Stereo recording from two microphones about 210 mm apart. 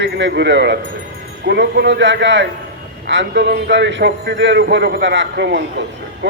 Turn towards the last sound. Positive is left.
turn(degrees=-60)  # may be behind; listen again after turning